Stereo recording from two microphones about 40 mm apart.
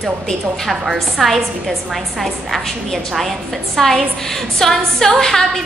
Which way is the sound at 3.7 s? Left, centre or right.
Centre.